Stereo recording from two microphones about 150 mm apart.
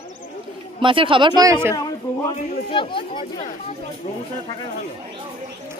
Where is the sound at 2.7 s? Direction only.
35° left (ahead or behind).